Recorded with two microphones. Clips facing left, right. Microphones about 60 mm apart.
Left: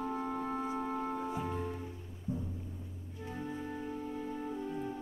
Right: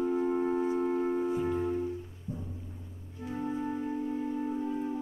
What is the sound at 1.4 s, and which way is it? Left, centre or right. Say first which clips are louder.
Music: right 7 dB; centre.